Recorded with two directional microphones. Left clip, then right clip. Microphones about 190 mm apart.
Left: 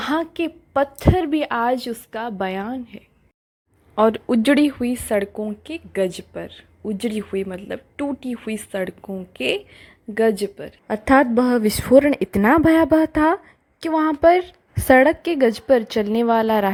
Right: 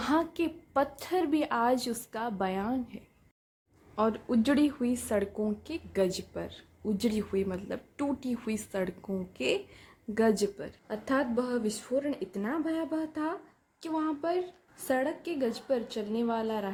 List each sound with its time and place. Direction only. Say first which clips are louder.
0.0 s speech: left 7 dB; 30° left (ahead or behind)
3.9 s speech: left 12 dB; 35° left (ahead or behind)
10.8 s speech: left 15 dB; 45° left (ahead or behind)